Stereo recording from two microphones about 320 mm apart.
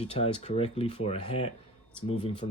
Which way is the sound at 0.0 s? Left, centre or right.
Centre.